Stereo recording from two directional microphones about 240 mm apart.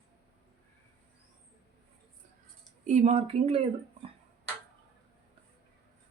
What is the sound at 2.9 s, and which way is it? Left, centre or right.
Speech, right.